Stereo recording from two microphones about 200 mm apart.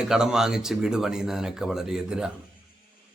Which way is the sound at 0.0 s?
5° right (ahead or behind).